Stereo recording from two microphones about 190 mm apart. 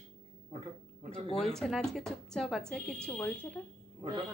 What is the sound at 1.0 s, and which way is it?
Speech, 35° right (ahead or behind).